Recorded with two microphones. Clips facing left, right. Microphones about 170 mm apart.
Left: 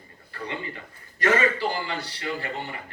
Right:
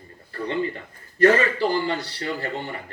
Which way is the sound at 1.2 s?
35° right (ahead or behind).